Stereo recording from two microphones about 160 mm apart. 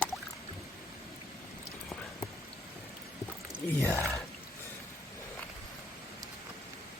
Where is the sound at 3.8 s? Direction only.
10° left (ahead or behind).